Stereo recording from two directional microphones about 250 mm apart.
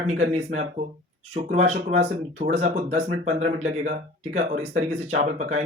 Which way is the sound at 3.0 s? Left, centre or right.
Right.